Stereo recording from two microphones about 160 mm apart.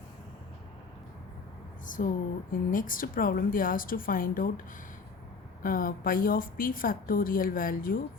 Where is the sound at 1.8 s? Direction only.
55° left (ahead or behind).